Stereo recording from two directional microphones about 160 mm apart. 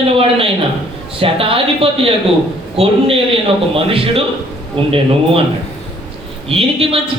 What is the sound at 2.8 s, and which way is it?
Speech, 40° right (ahead or behind).